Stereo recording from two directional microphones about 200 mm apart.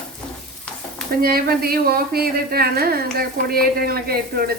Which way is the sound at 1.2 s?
50° right (ahead or behind).